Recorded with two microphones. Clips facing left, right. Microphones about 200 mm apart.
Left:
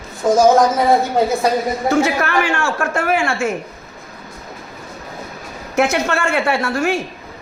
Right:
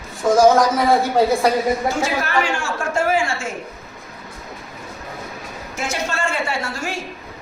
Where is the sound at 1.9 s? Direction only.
60° left (ahead or behind).